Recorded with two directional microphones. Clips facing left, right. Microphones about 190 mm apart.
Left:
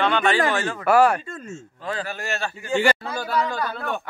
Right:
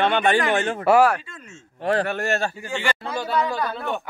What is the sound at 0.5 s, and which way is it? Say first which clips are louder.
Speech: right 2 dB; 25° right (ahead or behind).